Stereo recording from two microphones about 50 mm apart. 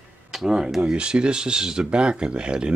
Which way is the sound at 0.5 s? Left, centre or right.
Centre.